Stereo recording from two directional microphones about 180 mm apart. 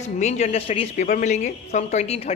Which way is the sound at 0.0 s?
40° left (ahead or behind).